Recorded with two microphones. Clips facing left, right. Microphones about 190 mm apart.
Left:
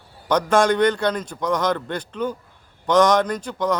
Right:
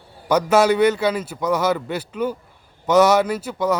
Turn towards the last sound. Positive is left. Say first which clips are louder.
# right 2 dB
turn(degrees=-5)  # may be behind; listen again after turning